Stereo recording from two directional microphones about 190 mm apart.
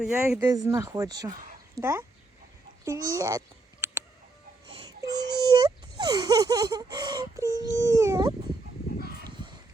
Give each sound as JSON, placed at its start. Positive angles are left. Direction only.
{"t": 0.0, "sound": "speech", "side_deg": -5}
{"t": 2.8, "sound": "a sound", "side_deg": -15}
{"t": 4.6, "sound": "babbling", "side_deg": -25}
{"t": 5.4, "sound": "baby cry", "side_deg": -20}
{"t": 6.9, "sound": "speech", "side_deg": -20}